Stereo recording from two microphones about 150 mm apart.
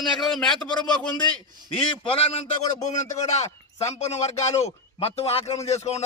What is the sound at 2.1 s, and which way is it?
A man's voice, 40° left (ahead or behind).